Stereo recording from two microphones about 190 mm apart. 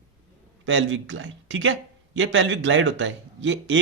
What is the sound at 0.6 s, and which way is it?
Speech, 85° right.